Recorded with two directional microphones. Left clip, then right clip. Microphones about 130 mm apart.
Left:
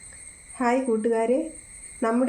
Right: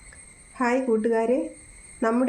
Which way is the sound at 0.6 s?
20° right (ahead or behind).